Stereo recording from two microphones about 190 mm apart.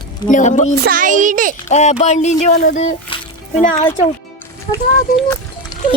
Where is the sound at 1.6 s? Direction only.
35° left (ahead or behind).